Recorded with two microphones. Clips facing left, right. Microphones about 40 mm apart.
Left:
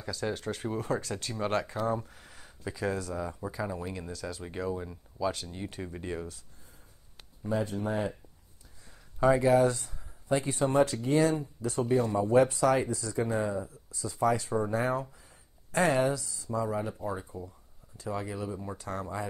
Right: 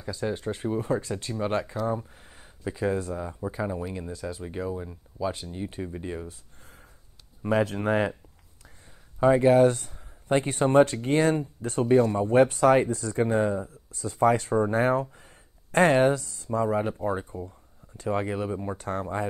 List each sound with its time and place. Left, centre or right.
0.1 s speech: right
2.0 s a sound: centre
2.7 s speech: right
3.3 s speech: centre
3.5 s speech: right
4.4 s speech: centre
7.4 s speech: right
9.2 s speech: right